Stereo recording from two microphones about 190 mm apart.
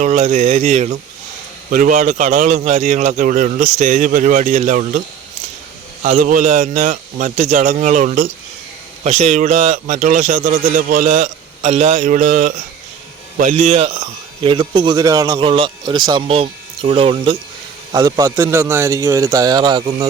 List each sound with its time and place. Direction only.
0.0 s speech: 35° right (ahead or behind)
6.0 s a man's voice: 40° right (ahead or behind)
17.9 s a man's voice: 15° right (ahead or behind)